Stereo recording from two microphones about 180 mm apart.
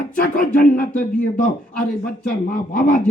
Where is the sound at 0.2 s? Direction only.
50° left (ahead or behind).